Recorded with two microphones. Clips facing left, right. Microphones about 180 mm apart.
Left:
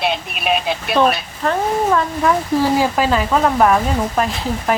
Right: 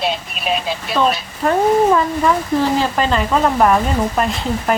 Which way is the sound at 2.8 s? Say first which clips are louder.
Left 1 dB; 5° left (ahead or behind).